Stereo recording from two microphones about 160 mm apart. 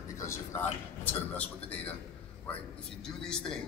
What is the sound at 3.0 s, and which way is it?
Speech, 5° left (ahead or behind).